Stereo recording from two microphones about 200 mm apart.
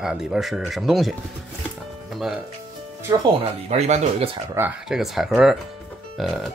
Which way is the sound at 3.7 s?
35° right (ahead or behind).